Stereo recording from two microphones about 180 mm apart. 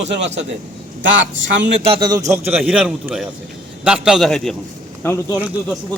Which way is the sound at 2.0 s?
20° right (ahead or behind).